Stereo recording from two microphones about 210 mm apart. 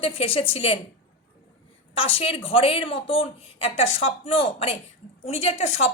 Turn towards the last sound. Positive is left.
turn(degrees=30)  # may be behind; listen again after turning